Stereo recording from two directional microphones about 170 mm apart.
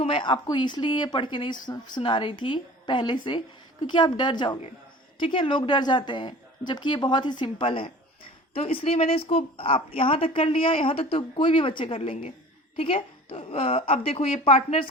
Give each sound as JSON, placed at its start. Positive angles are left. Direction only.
{"t": 0.0, "sound": "a woman's voice", "side_deg": 30}